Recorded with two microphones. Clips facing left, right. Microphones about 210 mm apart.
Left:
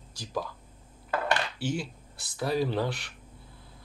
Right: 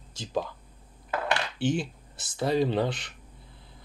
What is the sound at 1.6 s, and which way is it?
Speech, 20° right (ahead or behind).